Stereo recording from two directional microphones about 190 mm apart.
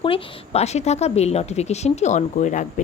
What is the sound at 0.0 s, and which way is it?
A woman's voice, 30° left (ahead or behind).